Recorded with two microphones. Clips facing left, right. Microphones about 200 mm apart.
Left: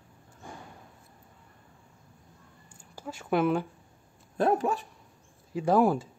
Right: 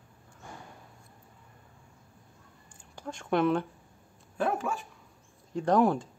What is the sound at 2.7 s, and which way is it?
Speech, 5° left (ahead or behind).